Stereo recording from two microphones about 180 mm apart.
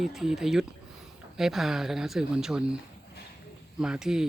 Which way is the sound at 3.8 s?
5° right (ahead or behind).